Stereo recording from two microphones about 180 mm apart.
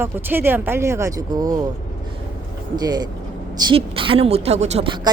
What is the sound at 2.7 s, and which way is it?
A woman's voice, 25° right (ahead or behind).